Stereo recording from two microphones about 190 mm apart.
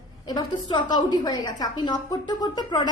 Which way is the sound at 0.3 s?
25° left (ahead or behind).